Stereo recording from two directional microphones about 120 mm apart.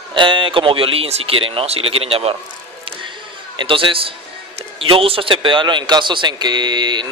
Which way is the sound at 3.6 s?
45° right (ahead or behind).